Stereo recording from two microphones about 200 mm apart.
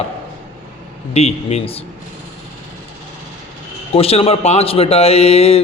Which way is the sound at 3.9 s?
30° left (ahead or behind).